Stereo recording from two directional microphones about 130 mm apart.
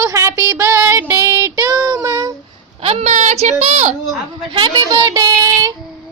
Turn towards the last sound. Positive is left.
turn(degrees=-30)  # may be behind; listen again after turning